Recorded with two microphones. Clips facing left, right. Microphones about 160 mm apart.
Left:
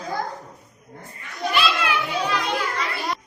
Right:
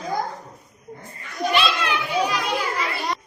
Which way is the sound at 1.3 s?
Centre (ahead or behind).